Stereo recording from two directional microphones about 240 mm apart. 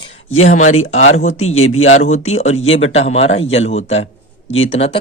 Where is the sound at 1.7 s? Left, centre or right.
Left.